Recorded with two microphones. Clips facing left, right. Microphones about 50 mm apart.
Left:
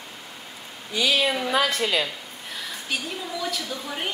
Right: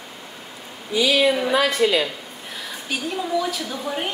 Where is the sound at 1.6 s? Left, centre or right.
Right.